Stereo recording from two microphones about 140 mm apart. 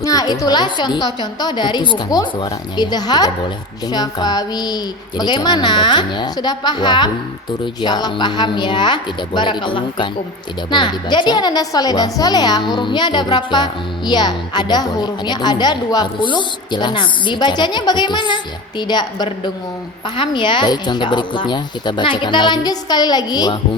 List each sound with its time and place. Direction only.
0.0 s a child's voice: 25° left (ahead or behind)